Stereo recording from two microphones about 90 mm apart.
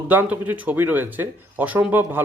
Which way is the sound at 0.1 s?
20° right (ahead or behind).